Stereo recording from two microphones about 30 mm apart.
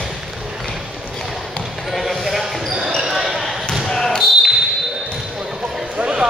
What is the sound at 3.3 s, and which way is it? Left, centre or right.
Basketball bounce, centre.